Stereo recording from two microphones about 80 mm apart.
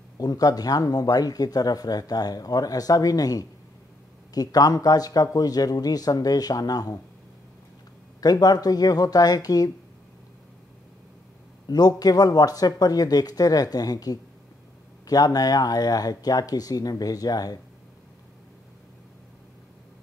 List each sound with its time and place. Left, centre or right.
0.2 s speech: left
8.2 s speech: left
11.6 s speech: left